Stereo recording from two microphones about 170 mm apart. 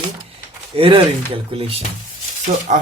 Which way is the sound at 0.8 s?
30° right (ahead or behind).